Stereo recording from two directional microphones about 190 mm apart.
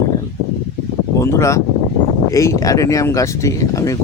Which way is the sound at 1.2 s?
15° left (ahead or behind).